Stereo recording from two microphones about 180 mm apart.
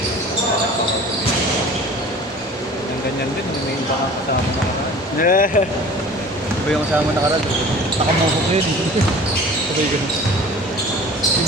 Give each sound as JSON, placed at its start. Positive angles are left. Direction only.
{"t": 5.2, "sound": "speech", "side_deg": 50}